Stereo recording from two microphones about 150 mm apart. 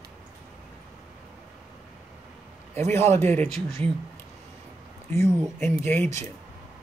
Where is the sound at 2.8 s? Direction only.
15° left (ahead or behind).